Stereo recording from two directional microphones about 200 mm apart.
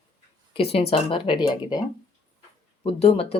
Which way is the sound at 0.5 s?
30° left (ahead or behind).